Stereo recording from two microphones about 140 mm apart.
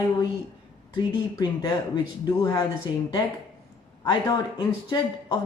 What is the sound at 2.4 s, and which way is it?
Speech, 25° left (ahead or behind).